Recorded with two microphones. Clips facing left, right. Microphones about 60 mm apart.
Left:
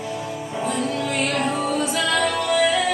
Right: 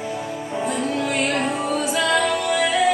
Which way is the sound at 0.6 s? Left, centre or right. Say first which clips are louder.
Right 1 dB; centre.